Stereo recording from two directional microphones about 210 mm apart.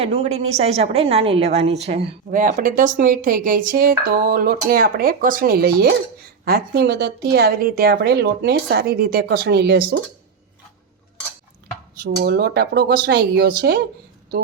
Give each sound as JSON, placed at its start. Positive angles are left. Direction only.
{"t": 0.0, "sound": "a woman's voice", "side_deg": -30}
{"t": 2.3, "sound": "speech", "side_deg": -40}
{"t": 12.0, "sound": "speech", "side_deg": -50}